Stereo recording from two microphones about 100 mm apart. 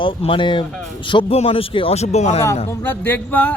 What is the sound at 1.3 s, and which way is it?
Speech, 75° left (ahead or behind).